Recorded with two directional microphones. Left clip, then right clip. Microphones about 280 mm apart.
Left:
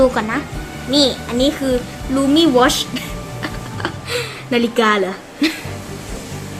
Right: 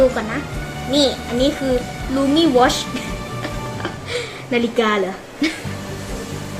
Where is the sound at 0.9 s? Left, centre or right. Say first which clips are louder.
Left 2 dB; centre.